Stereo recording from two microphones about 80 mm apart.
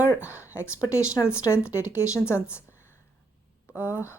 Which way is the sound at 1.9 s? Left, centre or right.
Left.